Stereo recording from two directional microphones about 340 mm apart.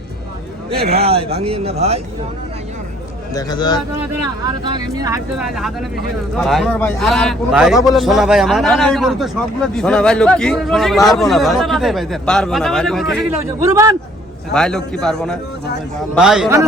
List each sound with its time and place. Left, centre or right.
0.8 s a man's voice: right
1.0 s speech: centre
3.3 s speech: centre
4.4 s a man's voice: centre
7.8 s speech: centre
8.0 s a man's voice: centre
14.5 s a man's voice: centre